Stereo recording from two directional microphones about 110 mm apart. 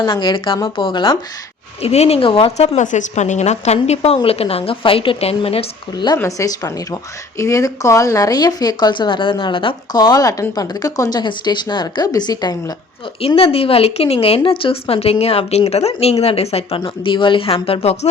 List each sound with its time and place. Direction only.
0.0 s speech: 45° left (ahead or behind)
1.8 s a woman's voice: 70° left (ahead or behind)
5.9 s speech: 40° left (ahead or behind)
13.2 s a woman's voice: 60° left (ahead or behind)